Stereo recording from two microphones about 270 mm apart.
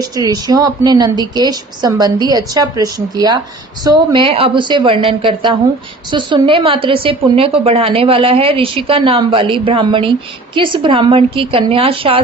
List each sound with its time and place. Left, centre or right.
0.2 s a woman's voice: centre